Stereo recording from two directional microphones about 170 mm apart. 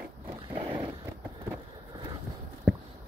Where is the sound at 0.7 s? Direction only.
10° right (ahead or behind).